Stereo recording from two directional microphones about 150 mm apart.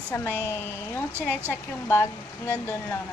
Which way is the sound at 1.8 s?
20° left (ahead or behind).